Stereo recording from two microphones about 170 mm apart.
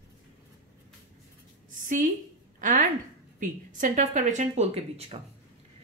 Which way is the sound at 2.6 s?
50° right (ahead or behind).